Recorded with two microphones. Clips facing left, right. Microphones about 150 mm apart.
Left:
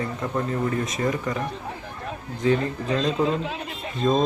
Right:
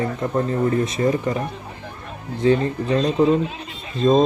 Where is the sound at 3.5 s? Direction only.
60° left (ahead or behind).